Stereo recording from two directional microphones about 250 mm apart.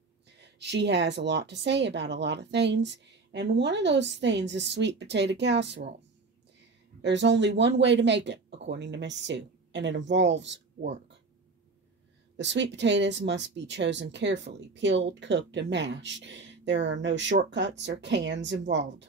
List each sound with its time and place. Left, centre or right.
0.4 s a woman's voice: right
7.0 s a woman's voice: right
12.4 s a woman's voice: right